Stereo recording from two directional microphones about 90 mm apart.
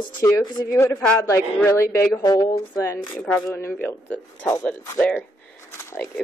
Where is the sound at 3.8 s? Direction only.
20° left (ahead or behind).